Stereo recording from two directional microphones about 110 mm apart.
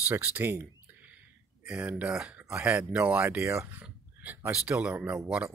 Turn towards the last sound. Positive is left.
turn(degrees=-10)  # may be behind; listen again after turning